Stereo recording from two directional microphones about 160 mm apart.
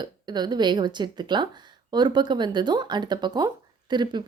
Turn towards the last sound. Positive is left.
turn(degrees=-25)  # may be behind; listen again after turning